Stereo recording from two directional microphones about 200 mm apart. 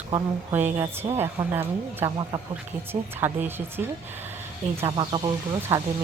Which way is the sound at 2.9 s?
25° right (ahead or behind).